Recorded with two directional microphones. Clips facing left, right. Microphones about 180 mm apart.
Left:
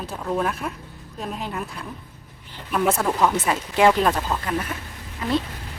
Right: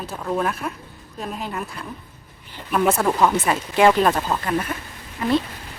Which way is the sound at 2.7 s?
55° right (ahead or behind).